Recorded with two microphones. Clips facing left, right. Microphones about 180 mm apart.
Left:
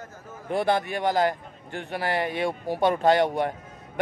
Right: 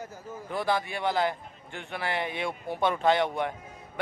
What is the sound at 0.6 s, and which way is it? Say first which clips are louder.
A man's voice: left 3 dB; 50° left (ahead or behind).